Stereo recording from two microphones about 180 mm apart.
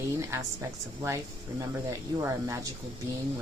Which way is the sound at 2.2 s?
15° right (ahead or behind).